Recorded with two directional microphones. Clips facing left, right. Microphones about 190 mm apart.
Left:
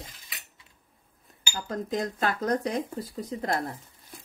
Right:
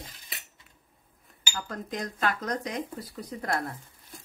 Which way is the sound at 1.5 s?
25° left (ahead or behind).